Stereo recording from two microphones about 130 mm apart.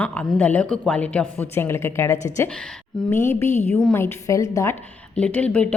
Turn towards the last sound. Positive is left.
turn(degrees=10)  # may be behind; listen again after turning